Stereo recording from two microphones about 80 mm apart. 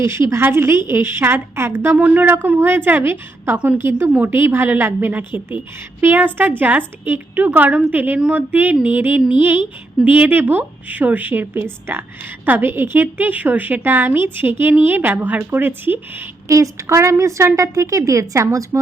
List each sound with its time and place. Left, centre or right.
0.0 s a woman's voice: right
16.5 s a woman's voice: right